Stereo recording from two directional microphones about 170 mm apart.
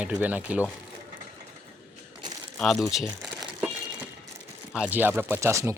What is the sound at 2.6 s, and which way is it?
Speech, 5° left (ahead or behind).